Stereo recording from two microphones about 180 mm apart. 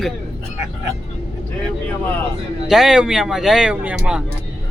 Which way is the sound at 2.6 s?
5° right (ahead or behind).